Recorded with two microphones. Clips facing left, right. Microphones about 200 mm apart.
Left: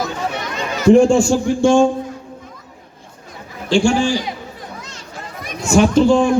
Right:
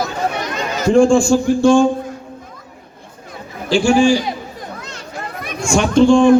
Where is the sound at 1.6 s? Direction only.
25° left (ahead or behind).